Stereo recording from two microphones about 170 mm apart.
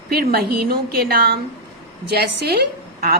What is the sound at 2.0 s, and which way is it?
A woman's voice, 65° right (ahead or behind).